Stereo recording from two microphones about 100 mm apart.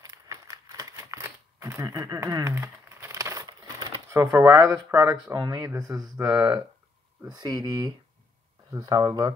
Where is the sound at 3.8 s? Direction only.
30° right (ahead or behind).